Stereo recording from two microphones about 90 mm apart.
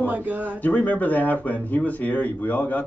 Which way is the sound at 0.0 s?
15° right (ahead or behind).